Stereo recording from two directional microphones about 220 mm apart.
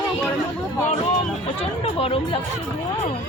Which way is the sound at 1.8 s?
25° left (ahead or behind).